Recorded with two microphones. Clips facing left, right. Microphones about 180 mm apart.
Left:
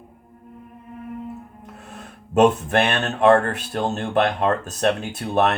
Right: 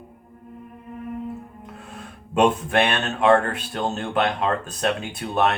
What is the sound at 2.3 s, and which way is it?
Speech, 40° left (ahead or behind).